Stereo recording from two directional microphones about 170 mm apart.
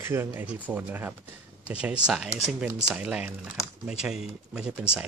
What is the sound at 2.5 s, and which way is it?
Speech, 5° right (ahead or behind).